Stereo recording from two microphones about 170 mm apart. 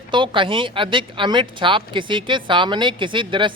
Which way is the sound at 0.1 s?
30° right (ahead or behind).